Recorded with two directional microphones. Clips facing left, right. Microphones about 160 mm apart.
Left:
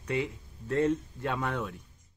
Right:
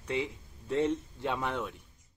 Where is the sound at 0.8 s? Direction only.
10° right (ahead or behind).